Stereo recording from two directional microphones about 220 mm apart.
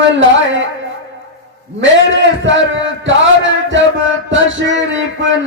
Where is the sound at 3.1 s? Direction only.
55° right (ahead or behind).